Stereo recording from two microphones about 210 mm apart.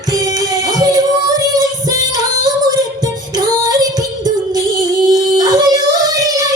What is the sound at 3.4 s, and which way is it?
Female singing, 20° right (ahead or behind).